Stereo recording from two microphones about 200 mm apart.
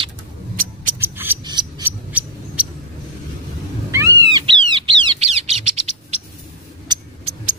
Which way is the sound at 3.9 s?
15° right (ahead or behind).